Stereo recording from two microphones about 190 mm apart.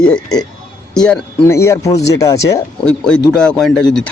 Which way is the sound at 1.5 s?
15° left (ahead or behind).